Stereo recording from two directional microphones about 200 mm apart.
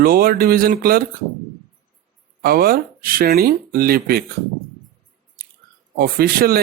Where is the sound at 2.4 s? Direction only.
45° right (ahead or behind).